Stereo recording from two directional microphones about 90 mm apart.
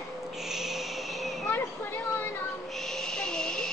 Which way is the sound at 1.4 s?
25° left (ahead or behind).